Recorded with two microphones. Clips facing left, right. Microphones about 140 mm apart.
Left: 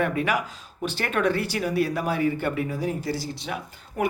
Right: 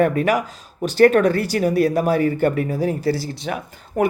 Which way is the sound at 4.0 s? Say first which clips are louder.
Right 7 dB; 45° right (ahead or behind).